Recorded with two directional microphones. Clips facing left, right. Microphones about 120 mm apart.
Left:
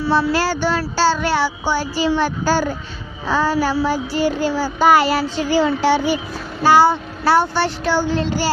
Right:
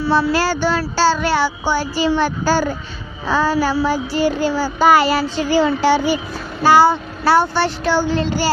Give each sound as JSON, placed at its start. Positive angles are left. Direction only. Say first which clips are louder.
{"t": 0.1, "sound": "child singing", "louder": "right 1 dB", "side_deg": -90}
{"t": 2.0, "sound": "child singing", "louder": "right 1 dB", "side_deg": -70}
{"t": 6.7, "sound": "child singing", "louder": "right 1 dB", "side_deg": -90}